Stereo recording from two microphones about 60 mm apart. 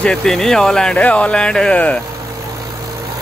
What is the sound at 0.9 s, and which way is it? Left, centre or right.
Speech, left.